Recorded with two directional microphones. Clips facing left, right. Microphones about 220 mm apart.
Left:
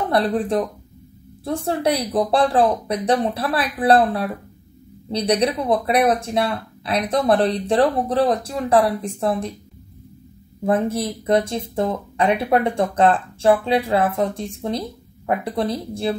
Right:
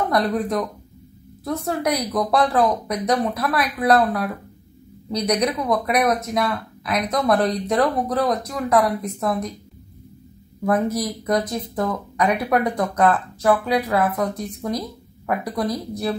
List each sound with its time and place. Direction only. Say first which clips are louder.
0.1 s speech: left 5 dB; 30° left (ahead or behind)
10.6 s speech: left 1 dB; 30° left (ahead or behind)